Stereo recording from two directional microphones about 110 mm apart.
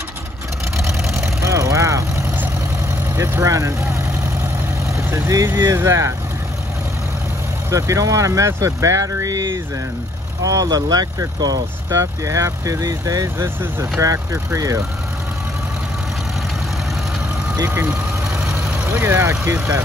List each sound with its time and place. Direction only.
1.1 s vehicle: 25° right (ahead or behind)
3.2 s speech: 25° right (ahead or behind)
4.9 s speech: 25° right (ahead or behind)
7.7 s speech: 30° right (ahead or behind)
17.6 s speech: 15° right (ahead or behind)
18.4 s vehicle: 10° right (ahead or behind)